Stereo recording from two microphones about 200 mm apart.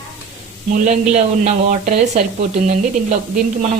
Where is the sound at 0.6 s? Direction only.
35° right (ahead or behind).